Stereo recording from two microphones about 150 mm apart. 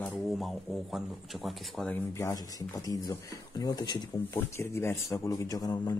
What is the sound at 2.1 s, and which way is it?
Speech, 20° left (ahead or behind).